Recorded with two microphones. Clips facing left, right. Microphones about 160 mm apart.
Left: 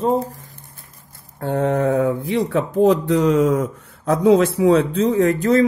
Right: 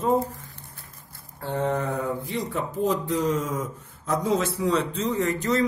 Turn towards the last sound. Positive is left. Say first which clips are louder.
# left 8 dB
turn(degrees=55)  # may be behind; listen again after turning